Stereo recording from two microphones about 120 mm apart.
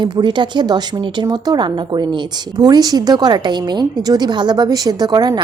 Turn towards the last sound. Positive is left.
turn(degrees=-35)  # may be behind; listen again after turning